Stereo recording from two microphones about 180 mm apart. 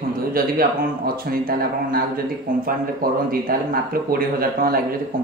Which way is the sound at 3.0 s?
55° right (ahead or behind).